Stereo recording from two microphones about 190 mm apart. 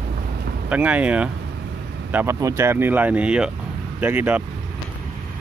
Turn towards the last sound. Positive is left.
turn(degrees=-10)  # may be behind; listen again after turning